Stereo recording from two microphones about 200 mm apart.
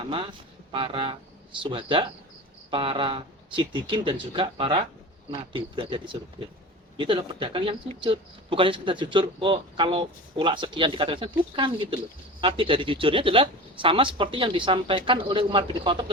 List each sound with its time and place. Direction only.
0.1 s speech: 25° right (ahead or behind)